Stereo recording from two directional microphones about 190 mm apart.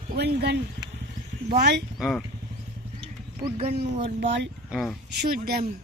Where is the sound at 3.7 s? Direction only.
65° right (ahead or behind).